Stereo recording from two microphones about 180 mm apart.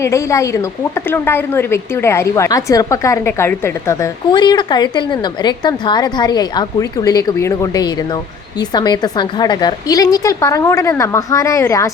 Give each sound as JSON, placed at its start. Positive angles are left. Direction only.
{"t": 0.0, "sound": "a woman's voice", "side_deg": 15}